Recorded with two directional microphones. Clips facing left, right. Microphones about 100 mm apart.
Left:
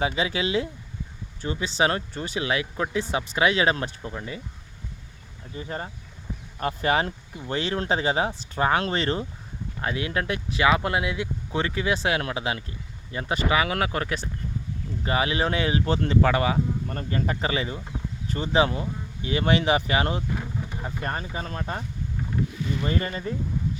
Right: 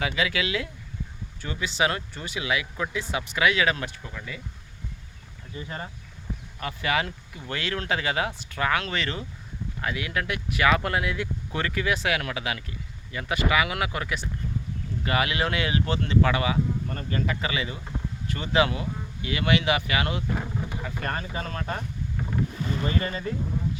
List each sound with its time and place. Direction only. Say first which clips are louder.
0.0 s speech: left 2 dB; 30° left (ahead or behind)
5.5 s speech: left 3 dB; 35° left (ahead or behind)
7.3 s speech: left 4 dB; 25° left (ahead or behind)
20.3 s vehicle: right 1 dB; 10° right (ahead or behind)
20.8 s speech: left 3 dB; 25° left (ahead or behind)
22.6 s speech: even; 40° right (ahead or behind)
22.9 s speech: left 1 dB; 35° left (ahead or behind)